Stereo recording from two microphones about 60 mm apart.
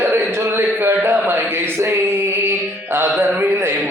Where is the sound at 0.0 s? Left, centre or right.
Right.